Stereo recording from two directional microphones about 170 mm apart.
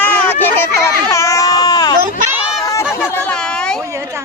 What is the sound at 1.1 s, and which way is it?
Baby cry, 20° left (ahead or behind).